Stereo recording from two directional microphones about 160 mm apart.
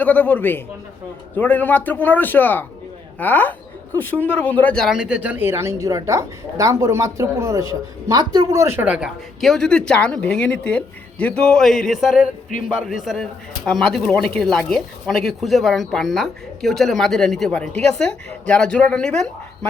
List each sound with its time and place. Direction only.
0.0 s a man's voice: 10° left (ahead or behind)